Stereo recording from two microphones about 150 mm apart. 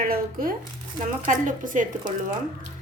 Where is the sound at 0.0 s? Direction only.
70° right (ahead or behind).